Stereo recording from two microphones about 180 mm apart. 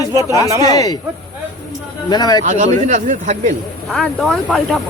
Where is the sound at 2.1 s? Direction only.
25° left (ahead or behind).